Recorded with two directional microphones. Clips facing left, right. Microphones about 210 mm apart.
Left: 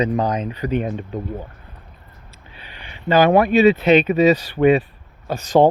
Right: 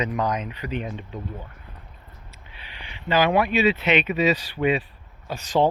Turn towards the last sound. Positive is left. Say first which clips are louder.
# left 7 dB
turn(degrees=50)  # may be behind; listen again after turning